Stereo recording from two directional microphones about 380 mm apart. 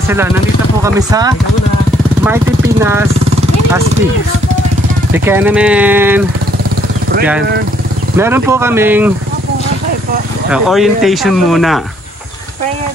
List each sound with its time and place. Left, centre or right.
0.8 s speech: centre
5.1 s speech: centre
8.2 s speech: centre
10.5 s speech: centre